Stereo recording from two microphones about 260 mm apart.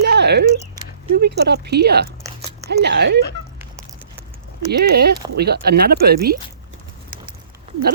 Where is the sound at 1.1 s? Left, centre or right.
Right.